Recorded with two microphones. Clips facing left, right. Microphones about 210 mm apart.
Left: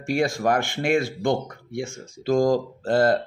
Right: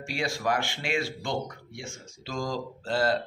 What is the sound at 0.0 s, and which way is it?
Speech, 50° left (ahead or behind).